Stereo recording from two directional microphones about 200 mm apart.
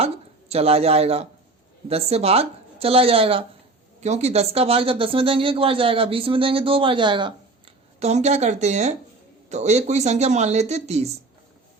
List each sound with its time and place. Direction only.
0.0 s a sound: 30° right (ahead or behind)
1.9 s speech: 30° right (ahead or behind)
7.9 s speech: 35° right (ahead or behind)